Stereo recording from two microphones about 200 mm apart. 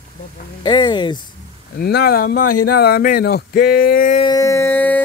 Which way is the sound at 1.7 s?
50° left (ahead or behind).